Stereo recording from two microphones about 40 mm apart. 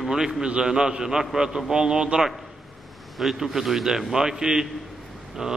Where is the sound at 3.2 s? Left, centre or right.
Centre.